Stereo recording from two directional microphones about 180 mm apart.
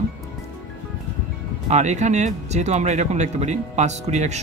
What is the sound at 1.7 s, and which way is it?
Speech, 40° right (ahead or behind).